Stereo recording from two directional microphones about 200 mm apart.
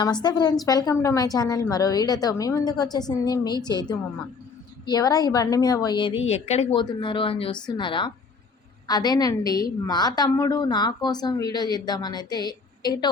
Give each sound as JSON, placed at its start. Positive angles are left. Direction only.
{"t": 0.0, "sound": "a woman's voice", "side_deg": 20}